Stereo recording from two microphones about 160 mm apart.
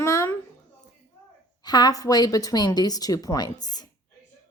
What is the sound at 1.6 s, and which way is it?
A woman's voice, 25° left (ahead or behind).